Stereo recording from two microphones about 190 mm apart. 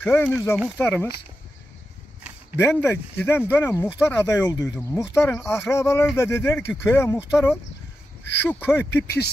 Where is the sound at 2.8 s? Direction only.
10° left (ahead or behind).